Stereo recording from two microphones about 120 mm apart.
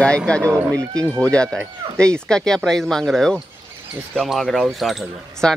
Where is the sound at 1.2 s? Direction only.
10° left (ahead or behind).